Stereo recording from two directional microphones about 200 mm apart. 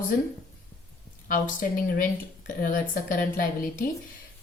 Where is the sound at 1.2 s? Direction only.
40° left (ahead or behind).